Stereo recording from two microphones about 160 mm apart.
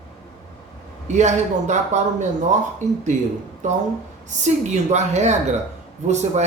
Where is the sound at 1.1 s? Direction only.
45° right (ahead or behind).